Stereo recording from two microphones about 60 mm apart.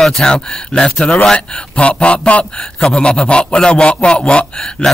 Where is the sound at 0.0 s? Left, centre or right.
Centre.